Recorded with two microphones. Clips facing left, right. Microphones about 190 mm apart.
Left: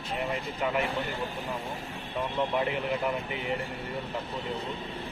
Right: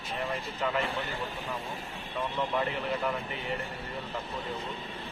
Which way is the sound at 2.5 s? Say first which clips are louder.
Left 2 dB; 15° left (ahead or behind).